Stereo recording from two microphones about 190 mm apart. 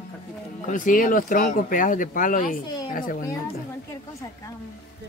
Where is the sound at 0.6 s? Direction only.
45° left (ahead or behind).